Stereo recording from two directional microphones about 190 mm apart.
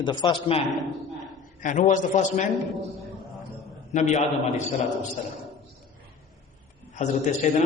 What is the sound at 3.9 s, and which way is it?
Speech, 40° left (ahead or behind).